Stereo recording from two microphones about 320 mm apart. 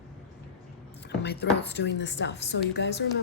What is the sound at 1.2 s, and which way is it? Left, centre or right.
Speech, left.